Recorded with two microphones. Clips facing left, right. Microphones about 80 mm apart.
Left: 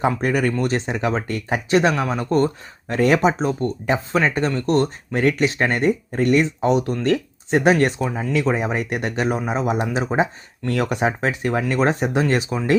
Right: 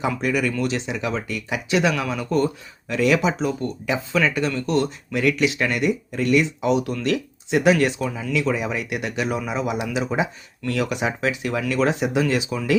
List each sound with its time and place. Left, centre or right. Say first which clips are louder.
0.0 s speech: left 3 dB; left